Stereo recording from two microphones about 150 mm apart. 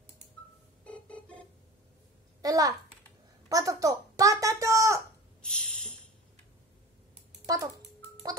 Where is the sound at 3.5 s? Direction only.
25° right (ahead or behind).